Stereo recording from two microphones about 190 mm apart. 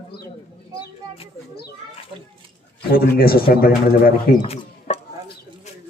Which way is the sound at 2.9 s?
50° left (ahead or behind).